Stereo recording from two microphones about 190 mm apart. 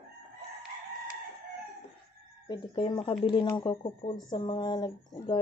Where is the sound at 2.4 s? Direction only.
25° left (ahead or behind).